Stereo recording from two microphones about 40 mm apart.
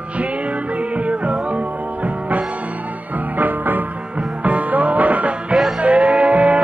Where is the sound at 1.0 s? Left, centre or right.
Right.